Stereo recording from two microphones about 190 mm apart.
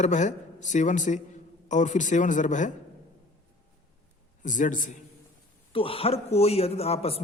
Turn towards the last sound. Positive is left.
turn(degrees=30)  # may be behind; listen again after turning